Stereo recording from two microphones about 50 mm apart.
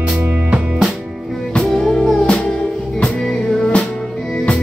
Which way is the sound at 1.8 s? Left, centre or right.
Centre.